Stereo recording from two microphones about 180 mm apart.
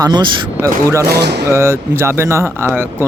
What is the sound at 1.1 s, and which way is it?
Speech, 65° right (ahead or behind).